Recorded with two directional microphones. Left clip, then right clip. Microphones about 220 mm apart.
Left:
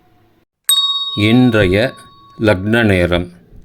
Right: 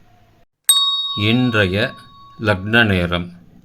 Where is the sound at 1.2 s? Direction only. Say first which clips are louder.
Left 6 dB; 25° left (ahead or behind).